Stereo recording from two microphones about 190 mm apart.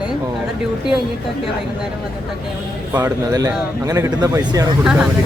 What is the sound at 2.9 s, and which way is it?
Speech, 20° right (ahead or behind).